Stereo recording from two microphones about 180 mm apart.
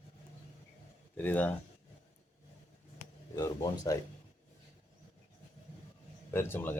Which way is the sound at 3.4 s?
20° left (ahead or behind).